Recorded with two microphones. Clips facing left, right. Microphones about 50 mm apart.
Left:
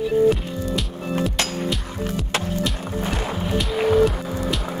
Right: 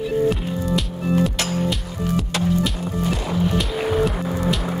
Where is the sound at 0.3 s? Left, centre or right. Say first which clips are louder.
Even; centre.